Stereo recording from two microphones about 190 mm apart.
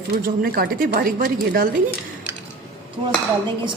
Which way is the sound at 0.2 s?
50° right (ahead or behind).